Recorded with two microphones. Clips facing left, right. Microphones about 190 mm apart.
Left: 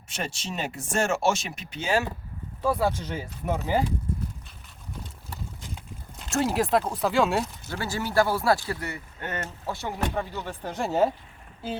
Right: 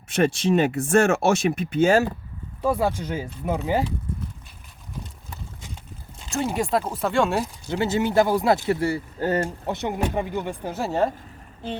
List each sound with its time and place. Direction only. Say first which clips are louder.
0.1 s speech: right 14 dB; 55° right (ahead or behind)
2.6 s speech: right 2 dB; 15° right (ahead or behind)
6.1 s speech: even; centre (ahead or behind)
7.7 s speech: right 11 dB; 20° right (ahead or behind)
9.6 s speech: right 5 dB; 20° right (ahead or behind); by 11.1 s centre (ahead or behind)